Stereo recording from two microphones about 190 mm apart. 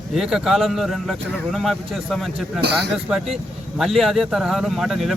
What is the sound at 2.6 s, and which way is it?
Speech, 60° right (ahead or behind).